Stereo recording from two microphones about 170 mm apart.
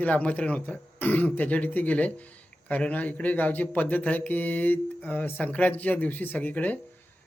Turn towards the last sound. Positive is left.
turn(degrees=10)  # may be behind; listen again after turning